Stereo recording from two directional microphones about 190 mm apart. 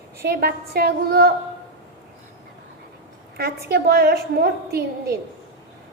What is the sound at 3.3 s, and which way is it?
A woman's voice, 55° right (ahead or behind).